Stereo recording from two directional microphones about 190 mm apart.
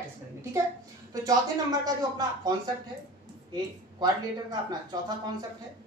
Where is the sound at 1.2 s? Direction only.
20° right (ahead or behind).